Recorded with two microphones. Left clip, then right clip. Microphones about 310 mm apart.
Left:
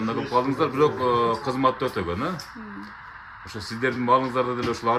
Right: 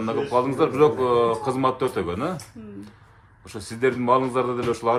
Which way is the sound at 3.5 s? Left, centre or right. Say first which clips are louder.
Right 3 dB; centre.